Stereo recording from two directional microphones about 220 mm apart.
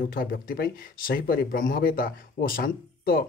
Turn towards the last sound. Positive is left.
turn(degrees=40)  # may be behind; listen again after turning